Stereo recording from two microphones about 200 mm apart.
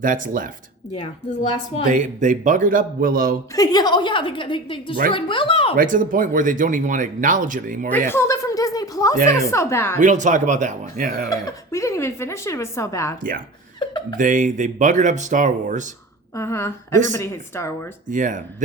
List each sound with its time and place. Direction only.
0.0 s speech: 40° right (ahead or behind)
1.8 s speech: 40° right (ahead or behind)
3.5 s a woman's voice: 20° left (ahead or behind)
5.7 s speech: 45° right (ahead or behind)
7.9 s speech: 10° left (ahead or behind)
10.0 s speech: 40° right (ahead or behind)
11.3 s speech: 15° left (ahead or behind)
13.7 s a sound: 20° left (ahead or behind)
14.2 s speech: 40° right (ahead or behind)
16.3 s speech: 15° left (ahead or behind)
18.1 s speech: 40° right (ahead or behind)